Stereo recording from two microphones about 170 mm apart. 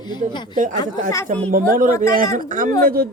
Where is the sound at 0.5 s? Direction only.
50° right (ahead or behind).